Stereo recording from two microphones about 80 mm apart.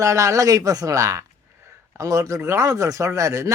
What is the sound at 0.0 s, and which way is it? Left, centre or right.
Speech, right.